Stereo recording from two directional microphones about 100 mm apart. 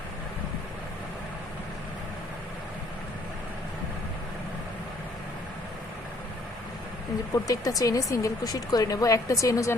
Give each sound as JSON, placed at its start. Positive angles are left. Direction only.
{"t": 7.4, "sound": "a woman's voice", "side_deg": 35}